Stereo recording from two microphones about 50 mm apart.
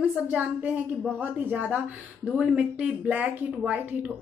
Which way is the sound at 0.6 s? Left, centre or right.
Right.